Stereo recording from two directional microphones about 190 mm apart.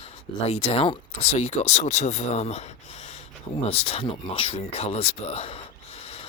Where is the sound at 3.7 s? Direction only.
30° left (ahead or behind).